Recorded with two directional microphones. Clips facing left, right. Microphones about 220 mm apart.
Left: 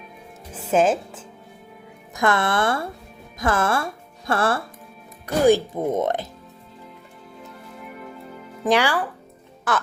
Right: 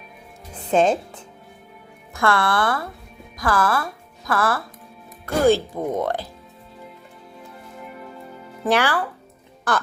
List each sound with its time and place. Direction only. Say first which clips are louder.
0.5 s speech: right 1 dB; 5° left (ahead or behind)
2.1 s speech: even; 20° left (ahead or behind)
5.2 s speech: left 1 dB; 15° left (ahead or behind)
8.6 s speech: even; 15° left (ahead or behind)